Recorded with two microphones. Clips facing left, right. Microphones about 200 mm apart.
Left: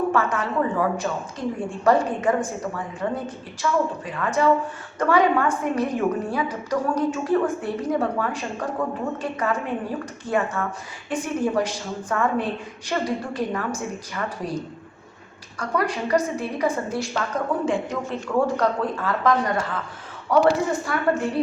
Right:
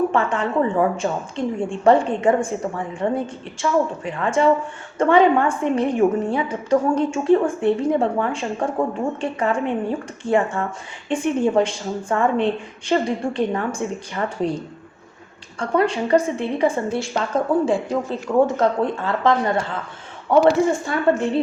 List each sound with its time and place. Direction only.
0.1 s a woman's voice: 25° right (ahead or behind)
15.5 s a woman's voice: 25° right (ahead or behind)